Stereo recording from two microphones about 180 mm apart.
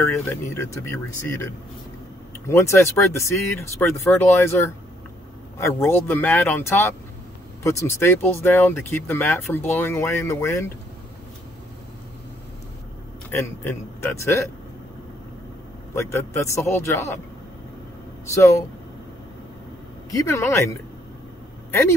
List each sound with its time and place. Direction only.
0.0 s speech: 15° left (ahead or behind)
7.6 s speech: 15° left (ahead or behind)
13.3 s speech: 15° left (ahead or behind)
15.9 s speech: 15° left (ahead or behind)
20.1 s speech: 15° left (ahead or behind)